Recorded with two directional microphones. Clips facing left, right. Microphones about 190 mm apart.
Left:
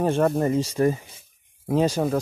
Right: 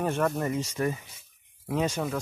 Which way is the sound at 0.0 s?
30° left (ahead or behind).